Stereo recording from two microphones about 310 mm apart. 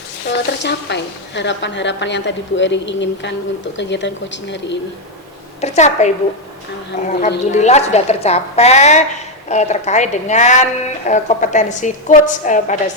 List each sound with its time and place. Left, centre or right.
0.3 s a woman's voice: left
5.5 s a woman's voice: left
7.2 s a woman's voice: left